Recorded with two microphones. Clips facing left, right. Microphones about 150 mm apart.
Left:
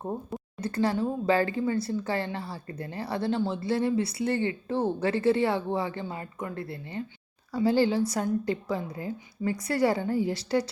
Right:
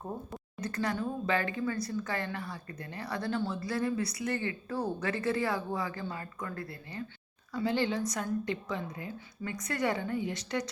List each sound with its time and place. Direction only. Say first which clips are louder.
0.6 s a woman's voice: left 6 dB; 30° left (ahead or behind)